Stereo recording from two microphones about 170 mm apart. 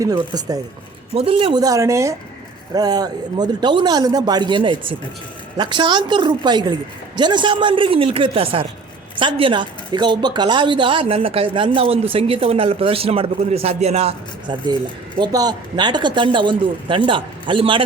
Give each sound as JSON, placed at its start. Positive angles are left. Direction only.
{"t": 0.0, "sound": "speech", "side_deg": -20}
{"t": 1.1, "sound": "speech", "side_deg": -35}
{"t": 15.2, "sound": "speech", "side_deg": -20}